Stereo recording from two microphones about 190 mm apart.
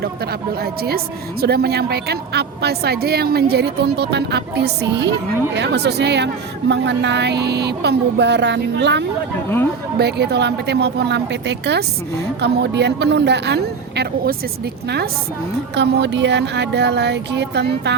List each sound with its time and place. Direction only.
0.6 s a woman's voice: 55° right (ahead or behind)
15.7 s a woman's voice: 65° right (ahead or behind)